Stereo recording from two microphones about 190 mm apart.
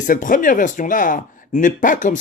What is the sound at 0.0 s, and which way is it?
A man's voice, 45° left (ahead or behind).